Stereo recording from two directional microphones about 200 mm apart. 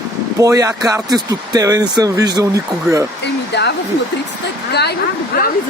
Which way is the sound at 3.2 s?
60° left (ahead or behind).